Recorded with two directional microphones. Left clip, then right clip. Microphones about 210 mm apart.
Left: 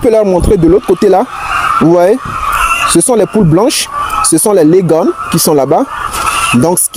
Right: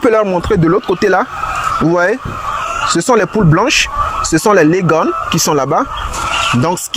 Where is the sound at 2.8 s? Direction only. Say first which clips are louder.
Left 3 dB; 25° left (ahead or behind).